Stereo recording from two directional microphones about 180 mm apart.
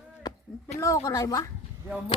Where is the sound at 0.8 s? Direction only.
20° left (ahead or behind).